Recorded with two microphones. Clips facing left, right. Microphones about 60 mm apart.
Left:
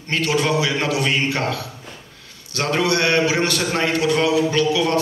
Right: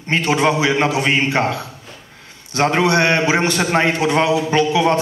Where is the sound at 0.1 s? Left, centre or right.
Right.